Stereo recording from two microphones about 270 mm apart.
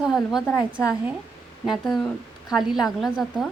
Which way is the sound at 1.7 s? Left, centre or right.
Centre.